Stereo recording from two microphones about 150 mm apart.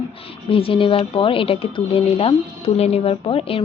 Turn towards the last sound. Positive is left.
turn(degrees=40)  # may be behind; listen again after turning